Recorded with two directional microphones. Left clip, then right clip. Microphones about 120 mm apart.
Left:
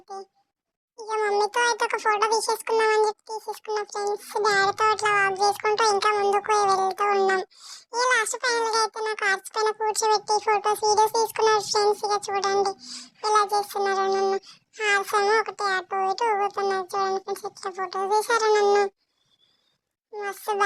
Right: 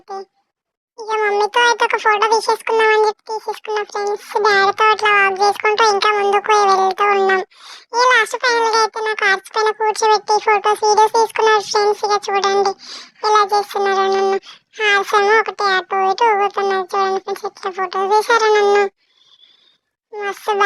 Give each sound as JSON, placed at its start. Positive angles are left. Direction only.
{"t": 0.1, "sound": "a sound", "side_deg": -25}
{"t": 1.2, "sound": "speech", "side_deg": -15}
{"t": 6.1, "sound": "speech", "side_deg": -15}
{"t": 6.4, "sound": "speech", "side_deg": -25}
{"t": 20.1, "sound": "speech", "side_deg": -25}